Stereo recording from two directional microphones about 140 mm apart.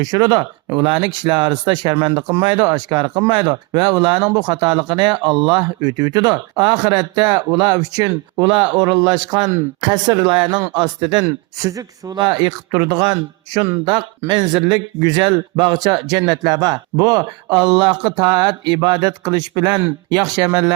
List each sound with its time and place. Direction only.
0.0 s speech: 30° right (ahead or behind)